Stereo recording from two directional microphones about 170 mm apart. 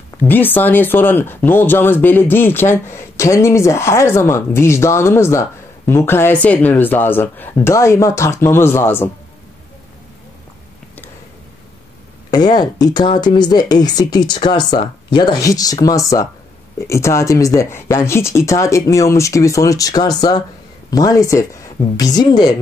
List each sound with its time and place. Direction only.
0.2 s speech: 10° left (ahead or behind)
12.3 s speech: 25° left (ahead or behind)